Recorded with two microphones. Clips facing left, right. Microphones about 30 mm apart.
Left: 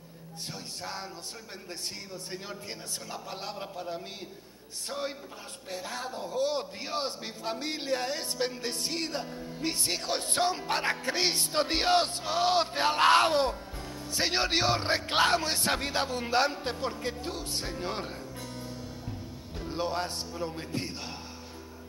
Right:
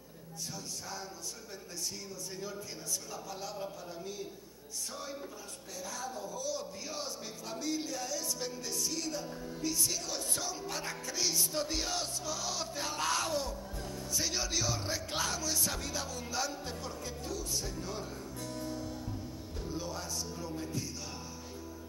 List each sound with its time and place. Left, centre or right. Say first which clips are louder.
0.5 s speech: left 5 dB; left
18.4 s music: right 1 dB; left
19.6 s music: left 9 dB; left